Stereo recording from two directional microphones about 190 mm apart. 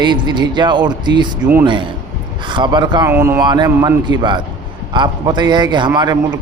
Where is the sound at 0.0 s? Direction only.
25° right (ahead or behind).